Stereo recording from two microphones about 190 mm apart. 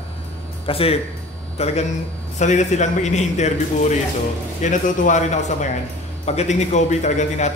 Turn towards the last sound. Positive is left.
turn(degrees=40)  # may be behind; listen again after turning